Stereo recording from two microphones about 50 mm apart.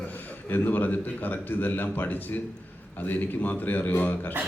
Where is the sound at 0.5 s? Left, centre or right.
Left.